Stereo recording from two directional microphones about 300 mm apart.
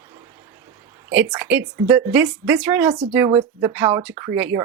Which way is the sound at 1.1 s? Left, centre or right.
Centre.